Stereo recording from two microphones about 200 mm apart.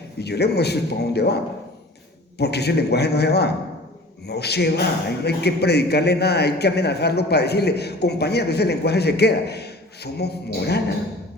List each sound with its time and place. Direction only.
0.2 s speech: 55° left (ahead or behind)
2.4 s speech: 55° left (ahead or behind)